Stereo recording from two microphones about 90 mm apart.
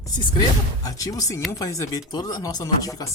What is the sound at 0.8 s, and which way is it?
Speech, 40° left (ahead or behind).